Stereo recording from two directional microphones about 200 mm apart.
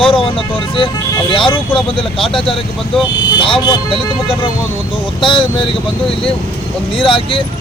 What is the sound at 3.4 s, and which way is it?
Speech, 25° left (ahead or behind).